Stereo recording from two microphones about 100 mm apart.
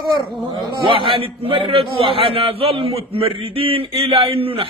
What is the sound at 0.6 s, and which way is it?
A man's voice, 55° right (ahead or behind).